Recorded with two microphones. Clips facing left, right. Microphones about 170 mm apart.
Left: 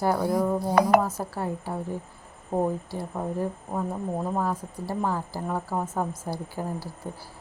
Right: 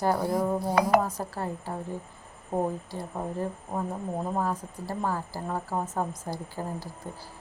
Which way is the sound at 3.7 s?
Centre (ahead or behind).